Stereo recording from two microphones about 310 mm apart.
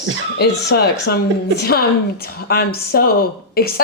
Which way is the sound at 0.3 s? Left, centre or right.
Left.